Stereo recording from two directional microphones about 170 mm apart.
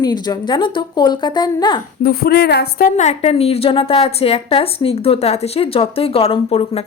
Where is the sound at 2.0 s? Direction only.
65° left (ahead or behind).